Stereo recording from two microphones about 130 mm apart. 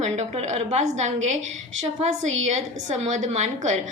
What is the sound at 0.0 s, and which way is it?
Speech, 60° right (ahead or behind).